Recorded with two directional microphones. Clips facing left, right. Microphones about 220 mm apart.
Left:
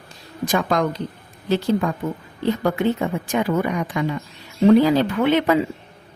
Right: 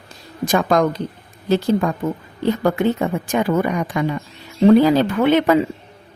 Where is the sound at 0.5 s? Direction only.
45° right (ahead or behind).